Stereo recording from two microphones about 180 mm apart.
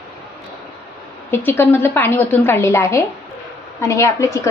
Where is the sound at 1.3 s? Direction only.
10° left (ahead or behind).